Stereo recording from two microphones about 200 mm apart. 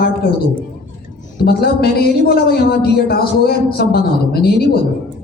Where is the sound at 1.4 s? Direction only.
50° left (ahead or behind).